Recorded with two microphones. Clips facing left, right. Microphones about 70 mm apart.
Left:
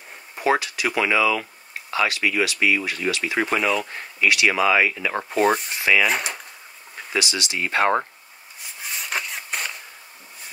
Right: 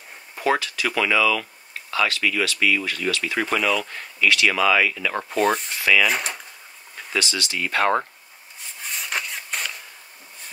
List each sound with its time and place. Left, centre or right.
0.4 s speech: centre
3.5 s speech: centre
3.8 s speech: left
5.1 s speech: centre
5.7 s speech: centre
6.0 s speech: centre
7.1 s speech: centre
8.8 s a sound: centre